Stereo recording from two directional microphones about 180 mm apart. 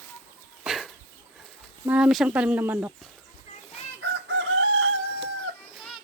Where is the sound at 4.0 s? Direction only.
90° right.